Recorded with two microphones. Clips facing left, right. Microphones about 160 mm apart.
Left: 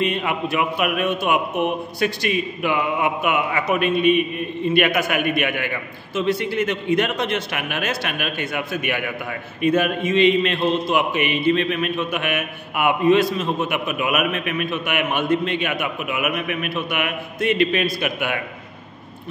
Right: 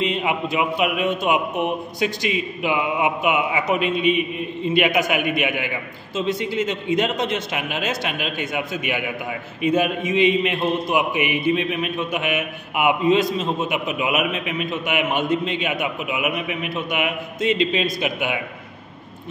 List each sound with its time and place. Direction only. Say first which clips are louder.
0.0 s a man's voice: even; 15° right (ahead or behind)
1.5 s a man's voice: left 1 dB; 20° left (ahead or behind)
2.0 s a man's voice: left 2 dB; 15° right (ahead or behind)